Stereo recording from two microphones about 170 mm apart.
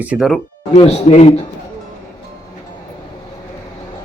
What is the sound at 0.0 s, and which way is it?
Speech, 5° right (ahead or behind).